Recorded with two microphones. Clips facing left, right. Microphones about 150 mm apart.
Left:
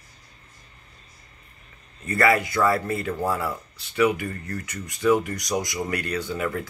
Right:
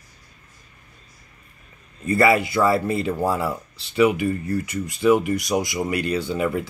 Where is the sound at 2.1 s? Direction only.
25° right (ahead or behind).